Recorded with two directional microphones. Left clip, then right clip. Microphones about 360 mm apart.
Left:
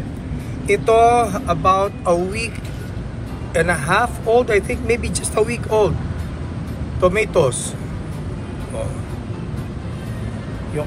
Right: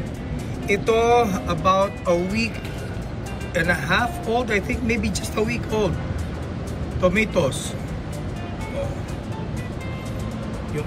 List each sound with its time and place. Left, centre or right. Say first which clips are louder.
0.7 s speech: left 5 dB; centre
3.5 s speech: left 4 dB; centre
7.0 s speech: left 4 dB; centre